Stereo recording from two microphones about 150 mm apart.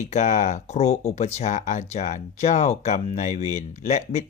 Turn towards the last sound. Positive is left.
turn(degrees=50)  # may be behind; listen again after turning